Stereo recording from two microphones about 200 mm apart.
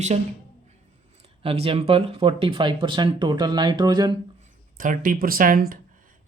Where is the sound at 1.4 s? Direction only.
30° right (ahead or behind).